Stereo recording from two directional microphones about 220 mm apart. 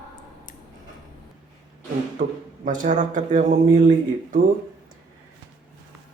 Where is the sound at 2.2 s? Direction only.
40° right (ahead or behind).